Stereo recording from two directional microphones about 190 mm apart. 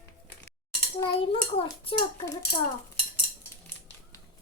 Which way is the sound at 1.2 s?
30° left (ahead or behind).